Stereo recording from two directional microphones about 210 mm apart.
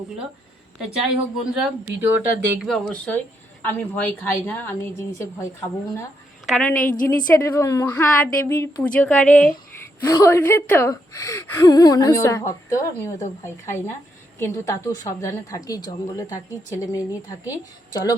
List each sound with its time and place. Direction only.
1.5 s speech: 5° right (ahead or behind)
6.7 s a woman's voice: 40° left (ahead or behind)
7.3 s a woman's voice: 15° left (ahead or behind)